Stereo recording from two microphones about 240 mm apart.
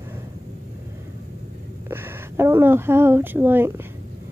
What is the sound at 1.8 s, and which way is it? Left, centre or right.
A woman's voice, centre.